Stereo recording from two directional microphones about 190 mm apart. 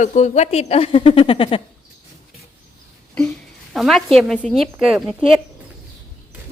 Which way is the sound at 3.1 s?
5° left (ahead or behind).